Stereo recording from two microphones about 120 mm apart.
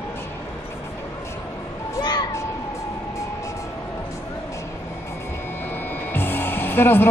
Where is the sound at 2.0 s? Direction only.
40° left (ahead or behind).